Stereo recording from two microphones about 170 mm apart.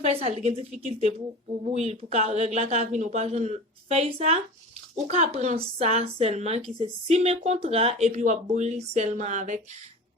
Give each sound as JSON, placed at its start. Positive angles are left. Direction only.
{"t": 0.0, "sound": "a man's voice", "side_deg": -35}